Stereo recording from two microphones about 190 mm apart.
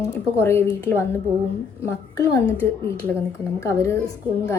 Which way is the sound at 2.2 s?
15° left (ahead or behind).